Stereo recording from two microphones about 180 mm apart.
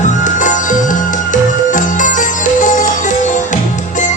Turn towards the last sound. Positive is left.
turn(degrees=45)  # may be behind; listen again after turning